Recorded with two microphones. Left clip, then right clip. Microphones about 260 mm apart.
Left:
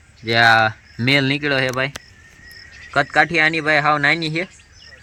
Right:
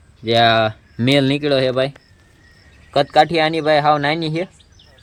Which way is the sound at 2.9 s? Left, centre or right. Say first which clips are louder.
Right 2 dB; centre.